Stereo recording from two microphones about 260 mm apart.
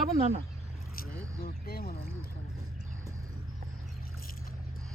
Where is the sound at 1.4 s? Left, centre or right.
Left.